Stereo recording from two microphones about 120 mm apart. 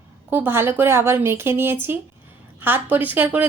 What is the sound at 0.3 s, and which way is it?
Speech, 20° right (ahead or behind).